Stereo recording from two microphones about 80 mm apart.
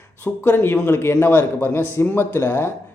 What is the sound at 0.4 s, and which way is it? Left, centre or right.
Speech, left.